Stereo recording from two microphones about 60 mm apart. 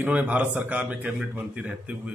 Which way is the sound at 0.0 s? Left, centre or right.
Right.